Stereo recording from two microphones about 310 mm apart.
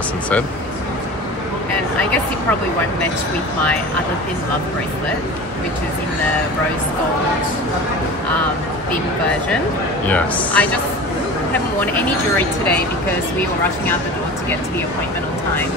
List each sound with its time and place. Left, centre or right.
10.0 s a man's voice: centre
11.8 s a man's voice: centre